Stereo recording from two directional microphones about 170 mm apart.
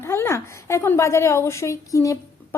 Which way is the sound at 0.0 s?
15° left (ahead or behind).